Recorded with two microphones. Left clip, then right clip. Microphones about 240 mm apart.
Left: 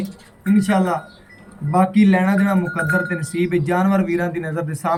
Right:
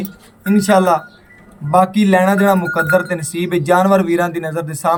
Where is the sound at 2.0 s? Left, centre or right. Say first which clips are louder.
Right 6 dB; right.